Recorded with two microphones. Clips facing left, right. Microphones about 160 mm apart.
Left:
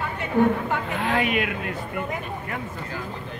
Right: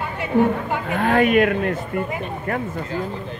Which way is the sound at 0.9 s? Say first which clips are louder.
Right 9 dB; 50° right (ahead or behind).